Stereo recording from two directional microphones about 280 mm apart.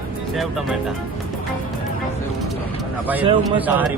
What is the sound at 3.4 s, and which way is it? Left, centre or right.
Speech, centre.